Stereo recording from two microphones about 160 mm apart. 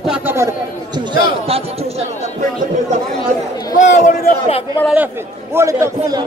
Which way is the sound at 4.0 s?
60° left (ahead or behind).